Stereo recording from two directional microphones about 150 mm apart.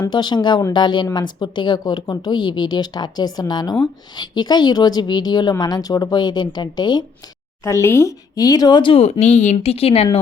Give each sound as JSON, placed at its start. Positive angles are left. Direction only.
{"t": 0.0, "sound": "a woman's voice", "side_deg": 30}
{"t": 7.6, "sound": "speech", "side_deg": 20}